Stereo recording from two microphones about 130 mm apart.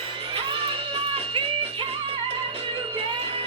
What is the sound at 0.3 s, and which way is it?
Music, 40° right (ahead or behind).